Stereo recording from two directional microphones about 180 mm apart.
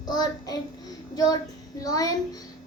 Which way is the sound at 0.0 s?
20° left (ahead or behind).